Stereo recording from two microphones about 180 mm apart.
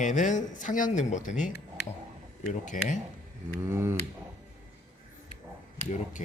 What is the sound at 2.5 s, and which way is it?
Speech, 45° left (ahead or behind).